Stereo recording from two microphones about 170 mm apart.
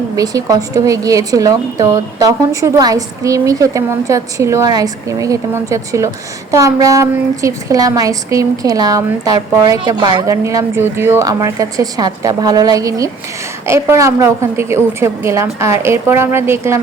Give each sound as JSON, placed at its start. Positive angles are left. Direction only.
{"t": 0.2, "sound": "a woman's voice", "side_deg": -20}